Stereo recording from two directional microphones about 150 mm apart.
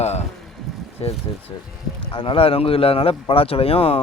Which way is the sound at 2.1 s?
35° left (ahead or behind).